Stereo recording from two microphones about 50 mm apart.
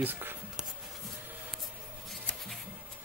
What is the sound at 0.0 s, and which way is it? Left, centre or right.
Speech, right.